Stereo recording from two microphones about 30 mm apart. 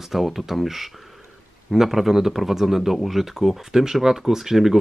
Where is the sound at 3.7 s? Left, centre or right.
Centre.